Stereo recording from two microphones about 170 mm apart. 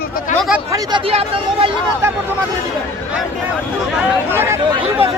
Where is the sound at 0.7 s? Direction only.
25° right (ahead or behind).